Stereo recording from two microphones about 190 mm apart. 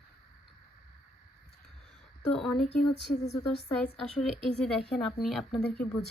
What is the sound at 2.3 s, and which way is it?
Speech, centre (ahead or behind).